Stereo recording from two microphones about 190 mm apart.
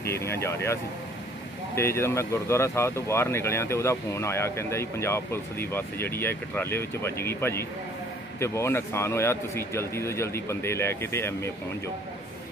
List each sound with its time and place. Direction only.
0.0 s speech: 15° left (ahead or behind)
1.8 s speech: 15° left (ahead or behind)